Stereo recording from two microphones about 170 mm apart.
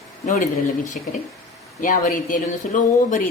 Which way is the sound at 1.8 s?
50° left (ahead or behind).